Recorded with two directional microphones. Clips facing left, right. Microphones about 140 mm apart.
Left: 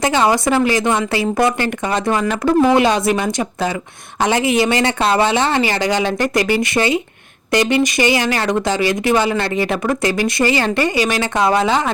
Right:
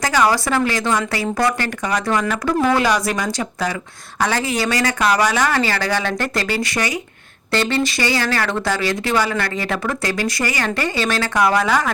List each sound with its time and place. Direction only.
0.0 s speech: 25° left (ahead or behind)